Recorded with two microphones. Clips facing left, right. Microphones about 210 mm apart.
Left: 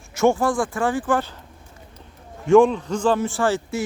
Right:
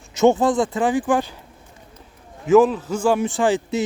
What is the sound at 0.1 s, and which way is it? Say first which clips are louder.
Speech: right 3 dB; 20° right (ahead or behind).